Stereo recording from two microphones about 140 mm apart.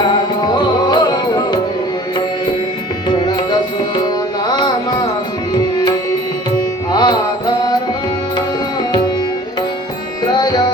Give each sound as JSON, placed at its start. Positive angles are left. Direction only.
{"t": 0.0, "sound": "music", "side_deg": 30}
{"t": 3.1, "sound": "music", "side_deg": 30}
{"t": 10.3, "sound": "music", "side_deg": 30}